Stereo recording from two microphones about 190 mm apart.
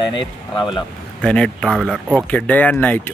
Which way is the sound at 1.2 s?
5° left (ahead or behind).